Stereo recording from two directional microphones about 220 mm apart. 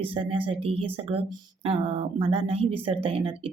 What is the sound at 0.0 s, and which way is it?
Speech, 25° right (ahead or behind).